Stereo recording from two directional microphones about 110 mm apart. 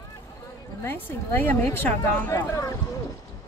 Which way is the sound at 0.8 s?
20° left (ahead or behind).